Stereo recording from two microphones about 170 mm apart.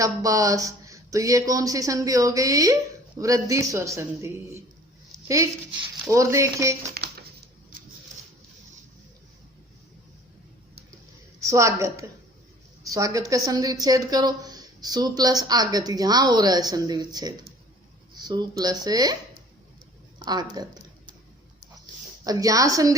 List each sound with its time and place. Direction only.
0.0 s a woman's voice: 20° right (ahead or behind)
6.1 s a sound: 15° right (ahead or behind)
6.9 s a sound: 65° right (ahead or behind)
11.3 s a woman's voice: 20° right (ahead or behind)
20.1 s speech: 25° right (ahead or behind)
22.2 s a woman's voice: 20° right (ahead or behind)